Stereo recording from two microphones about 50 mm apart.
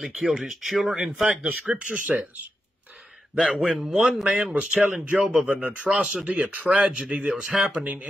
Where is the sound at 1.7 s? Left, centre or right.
Right.